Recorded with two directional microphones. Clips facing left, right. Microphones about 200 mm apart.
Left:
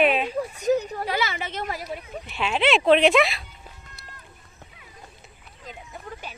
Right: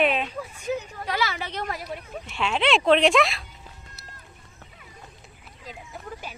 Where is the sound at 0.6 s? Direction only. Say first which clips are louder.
Left 7 dB; 40° left (ahead or behind).